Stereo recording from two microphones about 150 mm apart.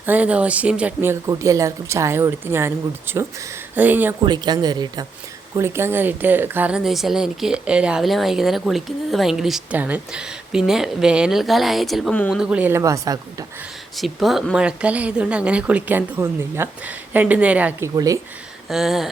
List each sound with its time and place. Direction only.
0.0 s speech: 10° right (ahead or behind)
1.3 s speech: 20° right (ahead or behind)
4.3 s speech: 25° right (ahead or behind)
5.5 s speech: 15° right (ahead or behind)
13.9 s speech: centre (ahead or behind); by 18.2 s 20° right (ahead or behind)
18.7 s speech: centre (ahead or behind)